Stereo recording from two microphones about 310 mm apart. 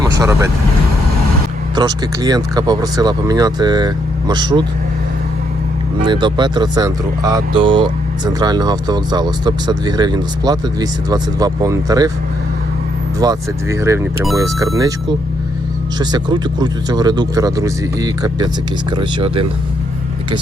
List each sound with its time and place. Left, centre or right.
0.0 s vehicle: centre
1.7 s speech: centre
6.1 s speech: centre
13.1 s speech: centre
16.0 s speech: centre